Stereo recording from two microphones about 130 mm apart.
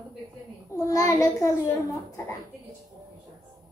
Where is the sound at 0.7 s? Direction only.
25° left (ahead or behind).